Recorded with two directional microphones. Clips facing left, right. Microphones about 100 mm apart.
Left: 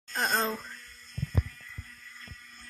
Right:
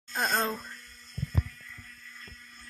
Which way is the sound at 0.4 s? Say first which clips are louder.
Even; 5° right (ahead or behind).